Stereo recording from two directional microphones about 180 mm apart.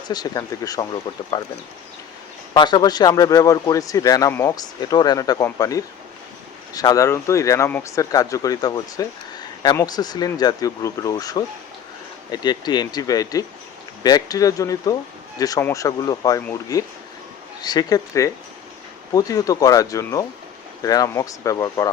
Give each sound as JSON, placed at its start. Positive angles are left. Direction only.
{"t": 0.1, "sound": "speech", "side_deg": 20}
{"t": 2.5, "sound": "speech", "side_deg": 25}